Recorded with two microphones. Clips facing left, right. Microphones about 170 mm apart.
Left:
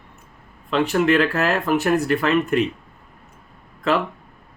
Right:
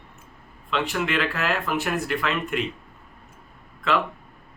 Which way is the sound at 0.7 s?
45° left (ahead or behind).